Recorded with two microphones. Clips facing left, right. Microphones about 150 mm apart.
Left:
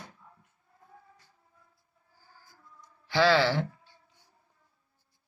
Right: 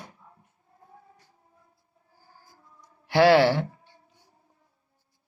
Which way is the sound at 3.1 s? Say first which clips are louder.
Right 6 dB; 60° right (ahead or behind).